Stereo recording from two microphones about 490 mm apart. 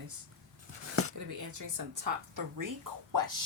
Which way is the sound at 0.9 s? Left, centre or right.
Right.